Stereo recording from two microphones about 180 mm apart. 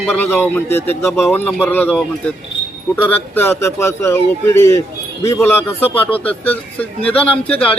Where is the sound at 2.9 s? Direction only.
10° left (ahead or behind).